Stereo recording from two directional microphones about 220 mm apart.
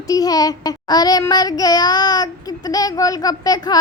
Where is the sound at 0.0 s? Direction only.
15° left (ahead or behind).